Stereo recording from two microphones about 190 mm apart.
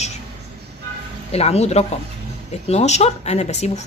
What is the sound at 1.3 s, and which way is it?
Speech, 35° left (ahead or behind).